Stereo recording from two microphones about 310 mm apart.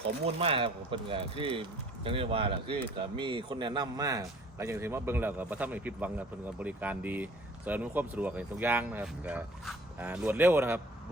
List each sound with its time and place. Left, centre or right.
0.3 s a man's voice: centre